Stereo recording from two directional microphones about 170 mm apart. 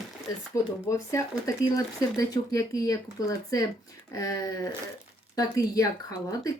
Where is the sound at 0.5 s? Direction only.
20° left (ahead or behind).